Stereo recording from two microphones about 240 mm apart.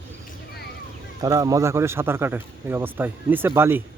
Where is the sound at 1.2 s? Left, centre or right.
Centre.